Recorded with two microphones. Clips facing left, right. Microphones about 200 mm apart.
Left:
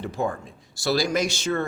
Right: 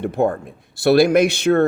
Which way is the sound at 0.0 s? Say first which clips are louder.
Right 8 dB; 60° right (ahead or behind).